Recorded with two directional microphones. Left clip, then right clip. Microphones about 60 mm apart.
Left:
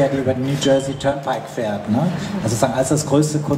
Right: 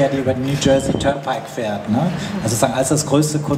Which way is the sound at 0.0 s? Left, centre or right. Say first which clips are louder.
Right 1 dB; right.